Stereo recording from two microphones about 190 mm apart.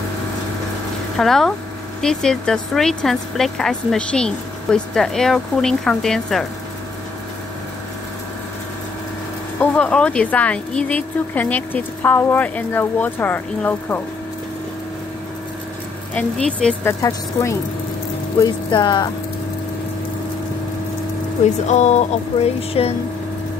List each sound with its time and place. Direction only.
1.1 s speech: centre (ahead or behind)
9.6 s speech: 5° left (ahead or behind)
16.2 s speech: 5° left (ahead or behind); by 19.0 s 25° left (ahead or behind)
21.6 s music: 35° left (ahead or behind)